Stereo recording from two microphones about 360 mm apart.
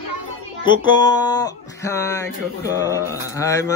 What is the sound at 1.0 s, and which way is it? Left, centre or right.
Speech, centre.